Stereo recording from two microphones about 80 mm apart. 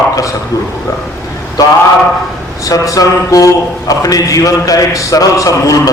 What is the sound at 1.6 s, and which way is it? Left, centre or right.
A man's voice, left.